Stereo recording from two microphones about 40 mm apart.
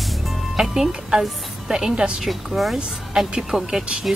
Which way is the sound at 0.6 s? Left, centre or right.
Centre.